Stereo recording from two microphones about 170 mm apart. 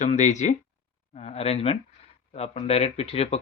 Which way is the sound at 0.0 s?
45° left (ahead or behind).